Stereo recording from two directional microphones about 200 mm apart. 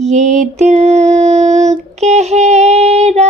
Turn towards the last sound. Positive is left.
turn(degrees=-30)  # may be behind; listen again after turning